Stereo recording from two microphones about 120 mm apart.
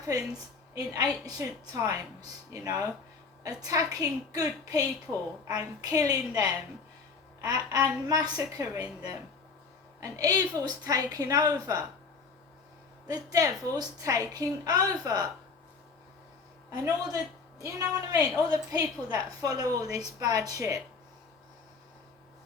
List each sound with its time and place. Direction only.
0.1 s a woman's voice: 30° right (ahead or behind)
10.0 s a woman's voice: 30° right (ahead or behind)
13.3 s a woman's voice: 30° right (ahead or behind)
16.7 s a woman's voice: 30° right (ahead or behind)